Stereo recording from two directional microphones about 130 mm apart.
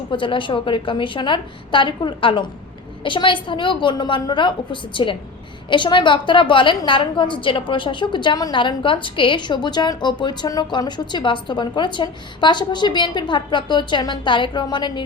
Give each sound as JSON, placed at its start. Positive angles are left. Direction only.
{"t": 0.1, "sound": "a woman's voice", "side_deg": 40}